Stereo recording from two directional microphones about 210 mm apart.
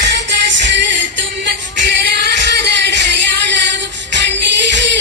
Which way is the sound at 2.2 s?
55° right (ahead or behind).